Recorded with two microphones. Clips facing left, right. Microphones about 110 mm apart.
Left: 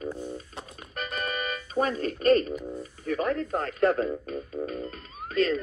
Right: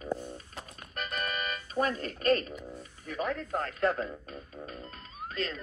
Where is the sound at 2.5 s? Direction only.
Centre (ahead or behind).